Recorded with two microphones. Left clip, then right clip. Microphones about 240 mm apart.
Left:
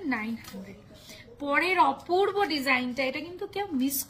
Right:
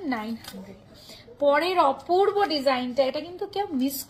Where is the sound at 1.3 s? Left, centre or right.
Centre.